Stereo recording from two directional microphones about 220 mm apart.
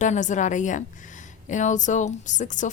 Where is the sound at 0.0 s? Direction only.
35° left (ahead or behind).